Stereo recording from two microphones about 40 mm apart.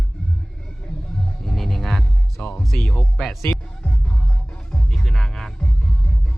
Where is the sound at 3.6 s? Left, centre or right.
Centre.